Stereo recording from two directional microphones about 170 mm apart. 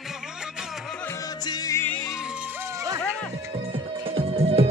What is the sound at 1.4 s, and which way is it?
Music, 20° left (ahead or behind).